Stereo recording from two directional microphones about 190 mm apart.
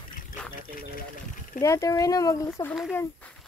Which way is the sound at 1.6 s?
15° left (ahead or behind).